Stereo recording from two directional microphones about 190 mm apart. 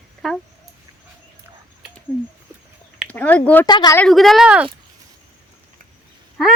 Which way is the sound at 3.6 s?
20° left (ahead or behind).